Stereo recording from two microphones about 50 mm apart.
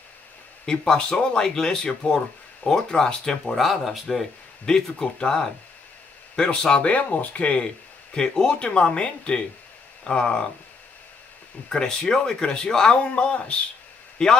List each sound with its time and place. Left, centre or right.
0.7 s speech: centre
3.4 s speech: centre
6.9 s speech: left
7.6 s speech: centre
11.7 s speech: centre